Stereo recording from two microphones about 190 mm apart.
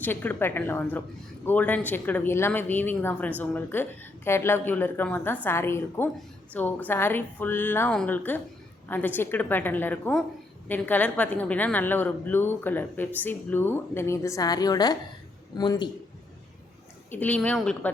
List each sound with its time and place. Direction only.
0.0 s a woman's voice: 10° left (ahead or behind)
17.1 s a woman's voice: 10° left (ahead or behind)